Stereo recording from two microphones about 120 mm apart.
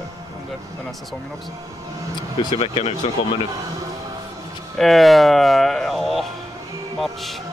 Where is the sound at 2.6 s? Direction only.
55° left (ahead or behind).